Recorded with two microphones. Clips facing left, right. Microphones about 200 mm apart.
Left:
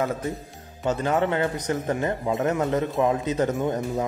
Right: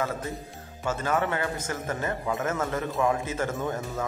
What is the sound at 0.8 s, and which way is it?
Speech, 20° left (ahead or behind).